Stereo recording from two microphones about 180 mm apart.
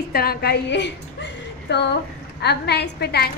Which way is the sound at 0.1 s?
55° left (ahead or behind).